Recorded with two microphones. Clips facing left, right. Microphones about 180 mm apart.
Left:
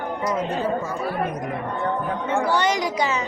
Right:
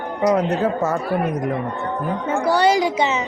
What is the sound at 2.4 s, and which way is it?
Speech, 35° right (ahead or behind).